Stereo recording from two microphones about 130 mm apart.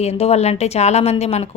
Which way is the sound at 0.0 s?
55° left (ahead or behind).